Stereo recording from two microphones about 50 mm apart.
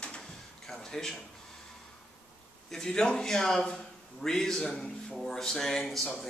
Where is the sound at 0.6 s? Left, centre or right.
Centre.